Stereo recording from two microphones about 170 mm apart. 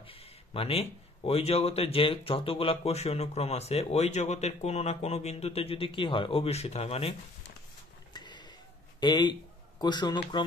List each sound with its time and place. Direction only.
0.0 s speech: 35° left (ahead or behind)
8.1 s a sound: 25° left (ahead or behind)
9.0 s speech: 25° left (ahead or behind)